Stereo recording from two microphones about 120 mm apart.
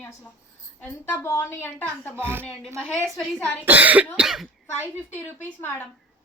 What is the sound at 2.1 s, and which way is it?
Speech, 20° right (ahead or behind).